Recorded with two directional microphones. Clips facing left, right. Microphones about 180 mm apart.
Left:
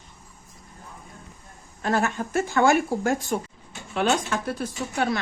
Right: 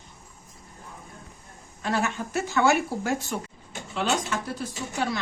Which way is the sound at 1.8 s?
50° left (ahead or behind).